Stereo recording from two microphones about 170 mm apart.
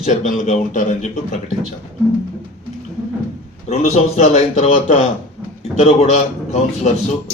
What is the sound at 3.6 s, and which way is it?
A man's voice, 40° left (ahead or behind).